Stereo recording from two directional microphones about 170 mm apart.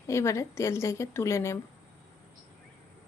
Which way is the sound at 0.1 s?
15° left (ahead or behind).